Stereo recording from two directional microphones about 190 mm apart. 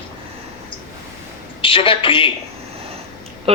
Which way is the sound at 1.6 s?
25° left (ahead or behind).